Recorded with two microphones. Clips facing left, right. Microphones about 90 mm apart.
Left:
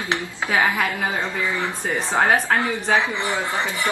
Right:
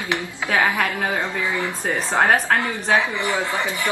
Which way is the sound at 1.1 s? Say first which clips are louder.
Right 1 dB; 15° right (ahead or behind).